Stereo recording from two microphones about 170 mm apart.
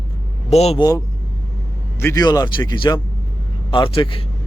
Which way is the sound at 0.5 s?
40° left (ahead or behind).